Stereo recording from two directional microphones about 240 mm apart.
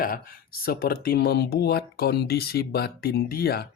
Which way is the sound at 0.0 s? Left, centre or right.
Left.